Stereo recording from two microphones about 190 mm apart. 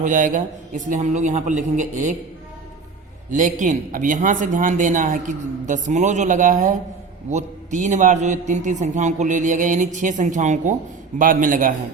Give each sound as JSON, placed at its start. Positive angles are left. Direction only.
{"t": 0.0, "sound": "a man's voice", "side_deg": -45}
{"t": 3.2, "sound": "a man's voice", "side_deg": -40}